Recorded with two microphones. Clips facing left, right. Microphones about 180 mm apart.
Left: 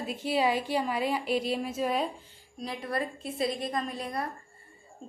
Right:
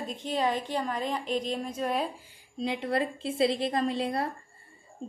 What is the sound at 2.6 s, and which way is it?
A woman's voice, 25° right (ahead or behind).